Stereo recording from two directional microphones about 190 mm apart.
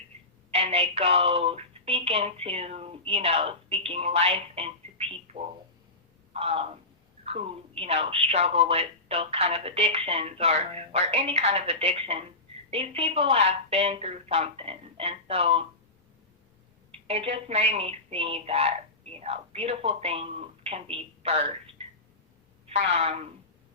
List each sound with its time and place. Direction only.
0.5 s a woman's voice: 30° right (ahead or behind)
17.1 s a woman's voice: 30° right (ahead or behind)
22.7 s a woman's voice: 30° right (ahead or behind)